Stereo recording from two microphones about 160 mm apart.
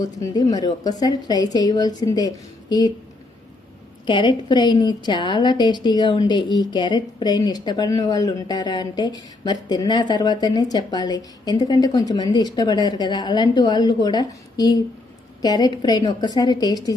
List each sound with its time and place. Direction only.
0.0 s a woman's voice: 25° left (ahead or behind)
4.0 s a woman's voice: 30° left (ahead or behind)